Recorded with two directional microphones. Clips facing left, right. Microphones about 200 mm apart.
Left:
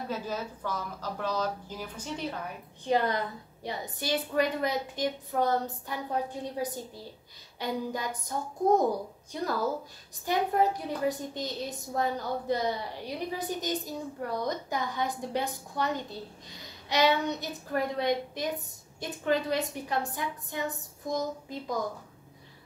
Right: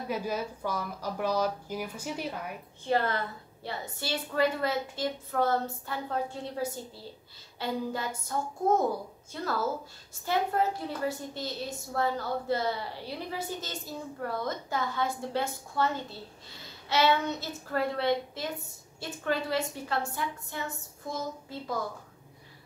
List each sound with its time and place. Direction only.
0.1 s speech: 10° right (ahead or behind)
2.8 s a woman's voice: 15° left (ahead or behind)